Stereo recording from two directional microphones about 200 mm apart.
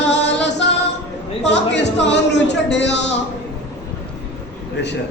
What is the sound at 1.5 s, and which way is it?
Music, 60° left (ahead or behind).